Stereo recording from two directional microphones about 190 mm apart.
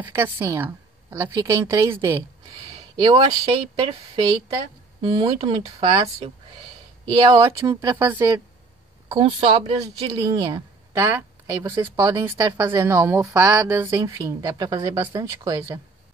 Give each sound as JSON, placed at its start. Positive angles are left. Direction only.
{"t": 0.0, "sound": "speech", "side_deg": -10}
{"t": 2.7, "sound": "a sound", "side_deg": -20}
{"t": 3.7, "sound": "a woman's voice", "side_deg": -20}
{"t": 9.1, "sound": "speech", "side_deg": -25}